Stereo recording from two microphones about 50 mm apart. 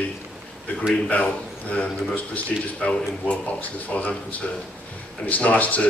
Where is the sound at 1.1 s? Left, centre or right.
Left.